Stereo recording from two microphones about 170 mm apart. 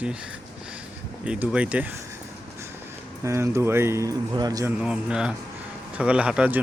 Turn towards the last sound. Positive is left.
turn(degrees=-5)  # may be behind; listen again after turning